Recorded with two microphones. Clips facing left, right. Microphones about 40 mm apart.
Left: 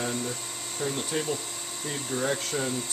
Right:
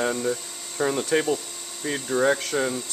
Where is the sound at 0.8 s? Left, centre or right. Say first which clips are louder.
Right 8 dB; right.